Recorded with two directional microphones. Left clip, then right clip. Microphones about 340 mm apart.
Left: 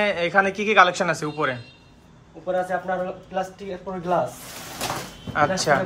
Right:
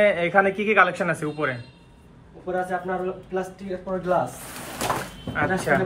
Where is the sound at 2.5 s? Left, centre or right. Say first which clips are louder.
Left 2 dB; left.